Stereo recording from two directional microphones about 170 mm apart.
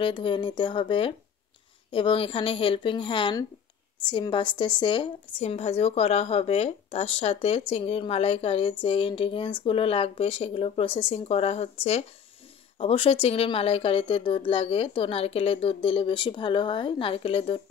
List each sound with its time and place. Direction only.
0.0 s speech: 30° left (ahead or behind)